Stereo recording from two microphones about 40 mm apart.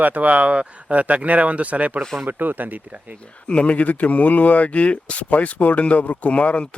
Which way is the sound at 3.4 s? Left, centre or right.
Left.